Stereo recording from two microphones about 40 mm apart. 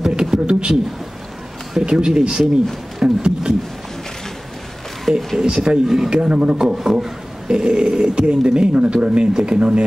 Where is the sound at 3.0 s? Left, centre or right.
Right.